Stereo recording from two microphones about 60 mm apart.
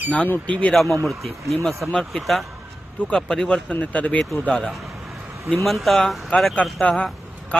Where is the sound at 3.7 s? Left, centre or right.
Left.